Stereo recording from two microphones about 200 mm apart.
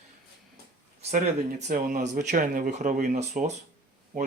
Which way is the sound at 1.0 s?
35° right (ahead or behind).